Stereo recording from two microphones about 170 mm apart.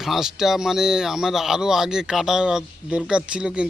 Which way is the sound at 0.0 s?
Centre (ahead or behind).